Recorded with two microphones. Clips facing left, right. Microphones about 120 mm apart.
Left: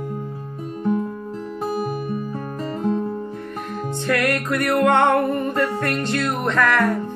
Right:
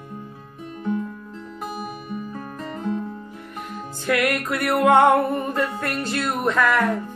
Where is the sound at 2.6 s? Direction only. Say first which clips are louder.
Left 5 dB; 35° left (ahead or behind).